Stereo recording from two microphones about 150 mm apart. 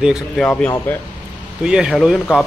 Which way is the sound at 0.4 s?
10° left (ahead or behind).